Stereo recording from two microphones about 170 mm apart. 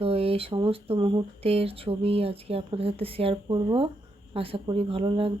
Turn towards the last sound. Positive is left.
turn(degrees=-30)  # may be behind; listen again after turning